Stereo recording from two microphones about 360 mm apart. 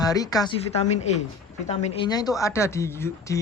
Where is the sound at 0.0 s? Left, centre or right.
Centre.